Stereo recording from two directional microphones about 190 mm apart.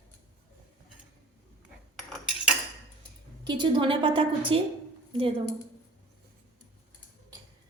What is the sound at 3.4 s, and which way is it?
A woman's voice, 25° right (ahead or behind).